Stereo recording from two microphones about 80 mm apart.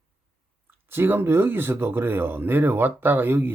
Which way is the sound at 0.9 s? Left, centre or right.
Right.